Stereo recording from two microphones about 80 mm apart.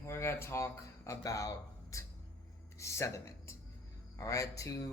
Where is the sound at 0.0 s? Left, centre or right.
Left.